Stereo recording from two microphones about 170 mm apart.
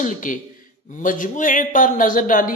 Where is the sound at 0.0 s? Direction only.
50° left (ahead or behind).